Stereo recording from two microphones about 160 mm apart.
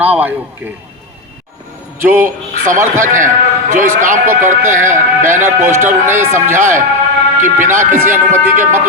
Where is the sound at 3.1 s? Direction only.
55° right (ahead or behind).